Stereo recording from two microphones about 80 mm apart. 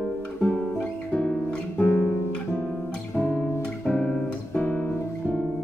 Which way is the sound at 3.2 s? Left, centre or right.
Left.